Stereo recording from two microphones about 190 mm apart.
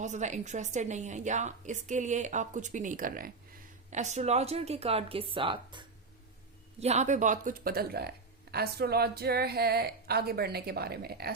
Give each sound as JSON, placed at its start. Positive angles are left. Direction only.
{"t": 0.0, "sound": "a woman's voice", "side_deg": -40}